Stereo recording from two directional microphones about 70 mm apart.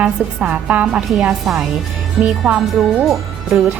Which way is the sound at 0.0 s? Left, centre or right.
Right.